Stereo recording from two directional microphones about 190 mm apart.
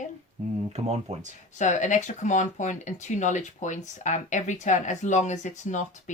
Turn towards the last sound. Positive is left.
turn(degrees=40)  # may be behind; listen again after turning